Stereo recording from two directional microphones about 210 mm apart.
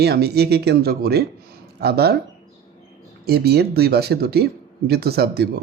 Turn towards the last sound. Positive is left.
turn(degrees=-50)  # may be behind; listen again after turning